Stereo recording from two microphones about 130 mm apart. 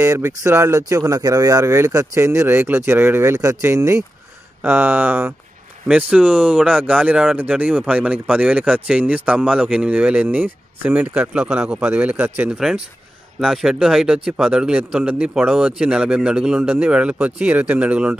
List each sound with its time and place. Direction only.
0.0 s speech: 20° right (ahead or behind)